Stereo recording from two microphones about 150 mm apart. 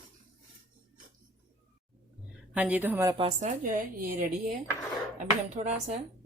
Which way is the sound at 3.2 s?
50° right (ahead or behind).